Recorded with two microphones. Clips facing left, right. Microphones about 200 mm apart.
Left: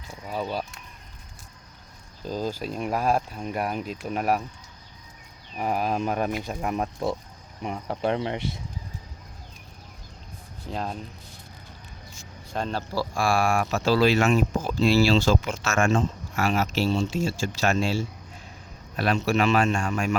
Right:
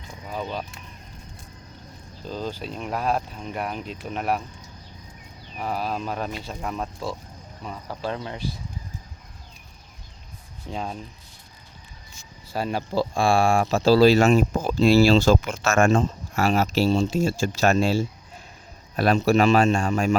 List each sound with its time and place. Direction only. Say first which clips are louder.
0.3 s speech: left 1 dB; 5° left (ahead or behind)
2.2 s speech: left 2 dB; 10° left (ahead or behind)
5.5 s speech: left 2 dB; 15° left (ahead or behind)
10.7 s speech: even; centre (ahead or behind)
12.5 s speech: right 2 dB; 10° right (ahead or behind)
12.9 s speech: right 4 dB; 25° right (ahead or behind)